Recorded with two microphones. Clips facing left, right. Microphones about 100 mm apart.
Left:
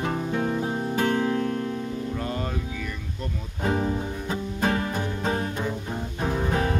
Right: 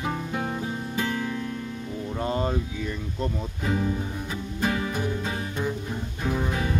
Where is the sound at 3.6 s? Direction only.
40° left (ahead or behind).